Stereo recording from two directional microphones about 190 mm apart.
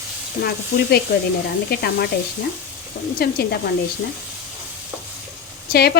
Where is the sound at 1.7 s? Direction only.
55° left (ahead or behind).